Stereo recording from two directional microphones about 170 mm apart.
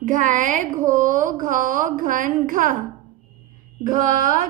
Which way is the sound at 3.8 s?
50° right (ahead or behind).